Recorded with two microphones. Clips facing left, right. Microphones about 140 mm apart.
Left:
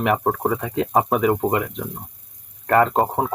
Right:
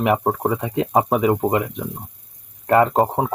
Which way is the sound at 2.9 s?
5° right (ahead or behind).